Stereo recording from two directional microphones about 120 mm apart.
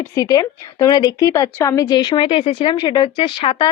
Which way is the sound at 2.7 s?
40° left (ahead or behind).